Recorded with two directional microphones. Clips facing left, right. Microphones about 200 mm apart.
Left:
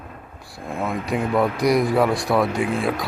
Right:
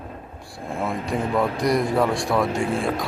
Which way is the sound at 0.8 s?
5° left (ahead or behind).